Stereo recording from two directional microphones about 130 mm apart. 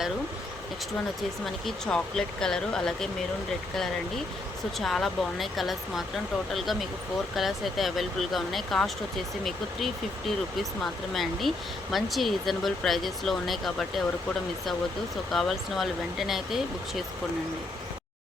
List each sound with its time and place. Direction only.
1.6 s speech: 5° left (ahead or behind)
4.8 s speech: centre (ahead or behind)
15.3 s speech: centre (ahead or behind)